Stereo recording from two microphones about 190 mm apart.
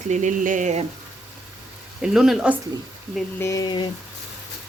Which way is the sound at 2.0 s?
5° right (ahead or behind).